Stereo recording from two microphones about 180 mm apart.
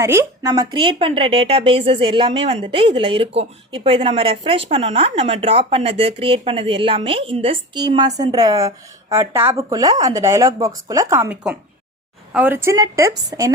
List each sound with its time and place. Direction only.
0.0 s a woman's voice: 15° right (ahead or behind)